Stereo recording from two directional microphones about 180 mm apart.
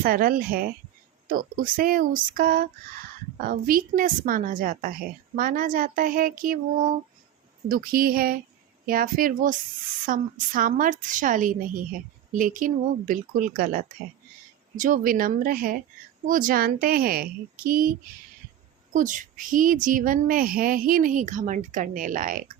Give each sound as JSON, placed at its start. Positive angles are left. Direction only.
{"t": 0.0, "sound": "a woman's voice", "side_deg": -55}
{"t": 7.7, "sound": "a woman's voice", "side_deg": -55}
{"t": 18.9, "sound": "a woman's voice", "side_deg": -45}